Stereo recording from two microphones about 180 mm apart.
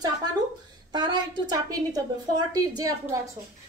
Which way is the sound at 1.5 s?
20° right (ahead or behind).